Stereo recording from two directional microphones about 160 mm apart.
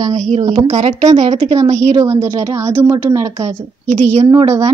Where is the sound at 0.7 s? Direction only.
45° right (ahead or behind).